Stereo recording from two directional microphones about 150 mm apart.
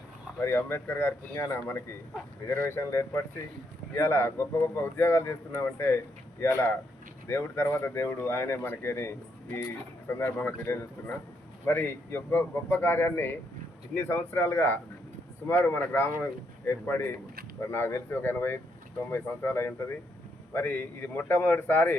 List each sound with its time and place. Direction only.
0.3 s speech: 15° left (ahead or behind)